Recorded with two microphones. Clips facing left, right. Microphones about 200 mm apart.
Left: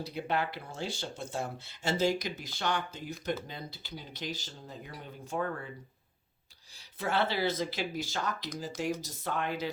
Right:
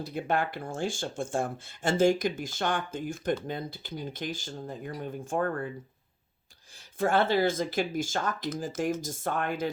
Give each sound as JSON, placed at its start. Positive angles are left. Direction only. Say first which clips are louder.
{"t": 0.0, "sound": "speech", "louder": "right 3 dB", "side_deg": -50}
{"t": 7.0, "sound": "speech", "louder": "right 6 dB", "side_deg": -50}